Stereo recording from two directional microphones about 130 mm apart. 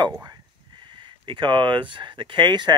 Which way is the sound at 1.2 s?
40° right (ahead or behind).